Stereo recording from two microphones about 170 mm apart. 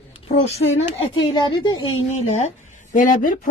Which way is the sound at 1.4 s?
25° left (ahead or behind).